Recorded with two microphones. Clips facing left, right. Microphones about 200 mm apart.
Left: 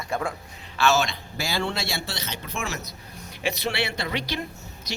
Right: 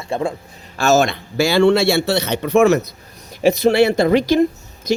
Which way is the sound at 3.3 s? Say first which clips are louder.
Right 14 dB; 40° right (ahead or behind).